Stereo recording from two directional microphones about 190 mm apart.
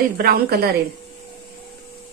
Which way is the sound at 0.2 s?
55° right (ahead or behind).